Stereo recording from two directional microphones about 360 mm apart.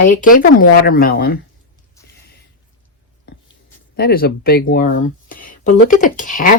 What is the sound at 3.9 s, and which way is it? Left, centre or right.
Speech, left.